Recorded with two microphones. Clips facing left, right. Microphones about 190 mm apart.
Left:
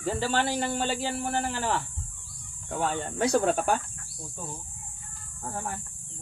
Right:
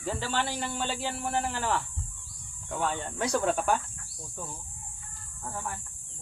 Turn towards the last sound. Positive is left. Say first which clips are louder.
# left 3 dB
turn(degrees=40)  # may be behind; listen again after turning